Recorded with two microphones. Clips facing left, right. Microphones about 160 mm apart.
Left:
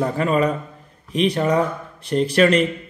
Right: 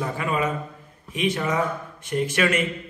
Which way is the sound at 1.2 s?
35° left (ahead or behind).